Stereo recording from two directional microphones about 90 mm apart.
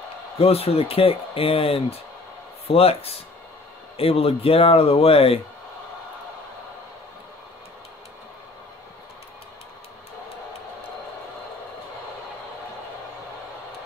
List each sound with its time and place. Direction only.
0.4 s speech: 90° left